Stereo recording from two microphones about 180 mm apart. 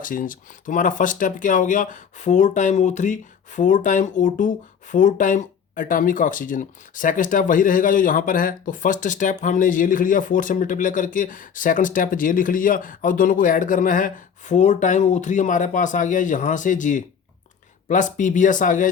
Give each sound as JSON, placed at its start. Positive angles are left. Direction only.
{"t": 0.0, "sound": "speech", "side_deg": 50}